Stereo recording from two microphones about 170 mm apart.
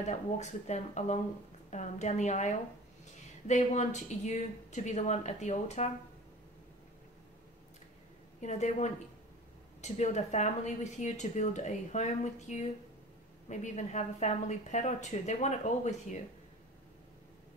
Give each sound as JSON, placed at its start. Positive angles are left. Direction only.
{"t": 0.4, "sound": "speech", "side_deg": 45}
{"t": 8.4, "sound": "speech", "side_deg": 45}